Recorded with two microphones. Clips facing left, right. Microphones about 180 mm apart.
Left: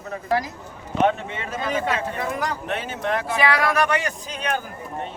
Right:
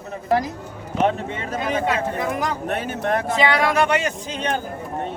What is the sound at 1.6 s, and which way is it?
Speech, 20° right (ahead or behind).